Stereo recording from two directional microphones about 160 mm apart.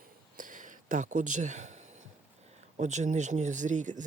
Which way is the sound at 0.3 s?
55° right (ahead or behind).